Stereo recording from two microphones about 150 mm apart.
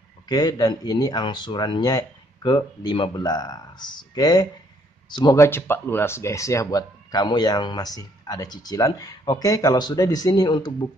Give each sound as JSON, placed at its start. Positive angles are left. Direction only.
{"t": 0.3, "sound": "speech", "side_deg": 25}